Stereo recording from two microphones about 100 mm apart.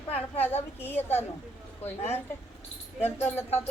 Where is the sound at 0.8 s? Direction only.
20° left (ahead or behind).